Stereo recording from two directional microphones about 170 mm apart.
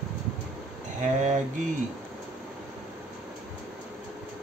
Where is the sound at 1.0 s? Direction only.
45° right (ahead or behind).